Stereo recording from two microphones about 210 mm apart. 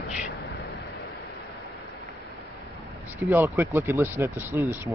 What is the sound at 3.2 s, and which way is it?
Speech, 10° right (ahead or behind).